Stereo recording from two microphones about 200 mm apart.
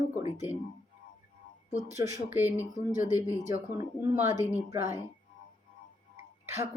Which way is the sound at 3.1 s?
15° left (ahead or behind).